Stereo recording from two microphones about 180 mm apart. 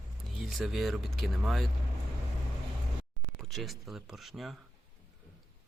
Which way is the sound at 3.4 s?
Centre (ahead or behind).